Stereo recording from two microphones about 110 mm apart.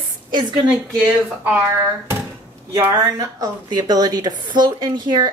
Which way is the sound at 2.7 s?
35° right (ahead or behind).